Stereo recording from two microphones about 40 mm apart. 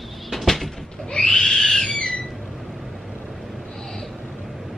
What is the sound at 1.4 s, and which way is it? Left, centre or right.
Wild animals, centre.